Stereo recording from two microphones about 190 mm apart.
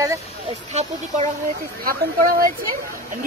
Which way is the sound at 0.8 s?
35° right (ahead or behind).